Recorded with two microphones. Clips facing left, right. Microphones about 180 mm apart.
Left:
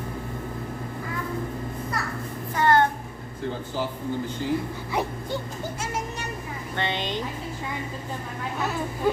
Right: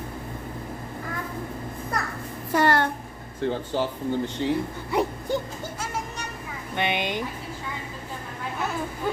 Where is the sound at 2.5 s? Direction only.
70° right (ahead or behind).